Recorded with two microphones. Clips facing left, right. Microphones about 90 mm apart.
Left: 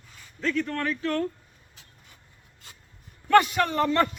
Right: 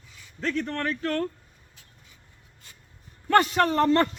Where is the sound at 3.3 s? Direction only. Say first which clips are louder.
Even; 35° right (ahead or behind).